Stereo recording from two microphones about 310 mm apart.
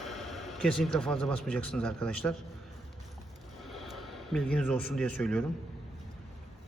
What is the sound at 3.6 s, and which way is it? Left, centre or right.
Speech, centre.